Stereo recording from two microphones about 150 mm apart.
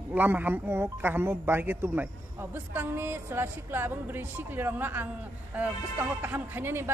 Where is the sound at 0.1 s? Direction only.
10° right (ahead or behind).